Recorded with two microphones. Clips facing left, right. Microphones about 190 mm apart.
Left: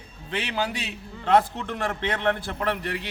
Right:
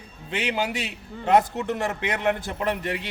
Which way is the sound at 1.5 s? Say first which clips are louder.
Right 3 dB; 10° right (ahead or behind).